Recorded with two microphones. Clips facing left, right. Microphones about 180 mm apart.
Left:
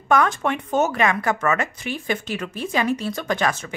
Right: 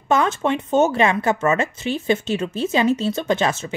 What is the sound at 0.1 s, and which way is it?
Speech, 25° right (ahead or behind).